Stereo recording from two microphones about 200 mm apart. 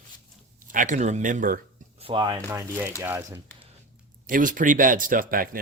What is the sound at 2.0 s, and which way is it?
Speech, 20° right (ahead or behind).